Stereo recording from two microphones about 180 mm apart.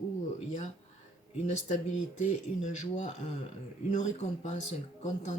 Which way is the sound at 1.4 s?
40° left (ahead or behind).